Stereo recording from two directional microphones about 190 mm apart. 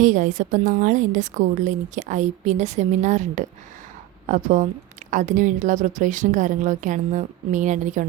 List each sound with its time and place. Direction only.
0.0 s a woman's voice: 40° right (ahead or behind)